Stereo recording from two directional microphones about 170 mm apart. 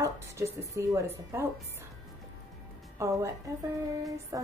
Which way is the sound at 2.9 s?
15° right (ahead or behind).